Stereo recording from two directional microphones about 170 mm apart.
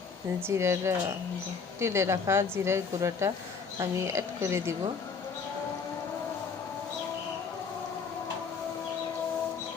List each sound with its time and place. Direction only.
0.4 s speech: 15° right (ahead or behind)